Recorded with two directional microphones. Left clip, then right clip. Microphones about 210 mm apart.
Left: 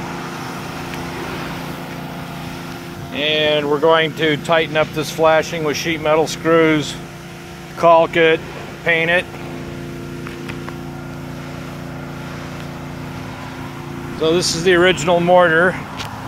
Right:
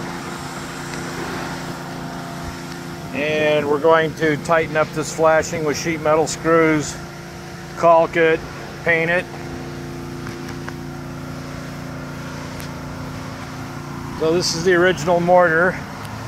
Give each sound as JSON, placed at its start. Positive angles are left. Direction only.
{"t": 3.2, "sound": "speech", "side_deg": 10}
{"t": 14.2, "sound": "speech", "side_deg": 15}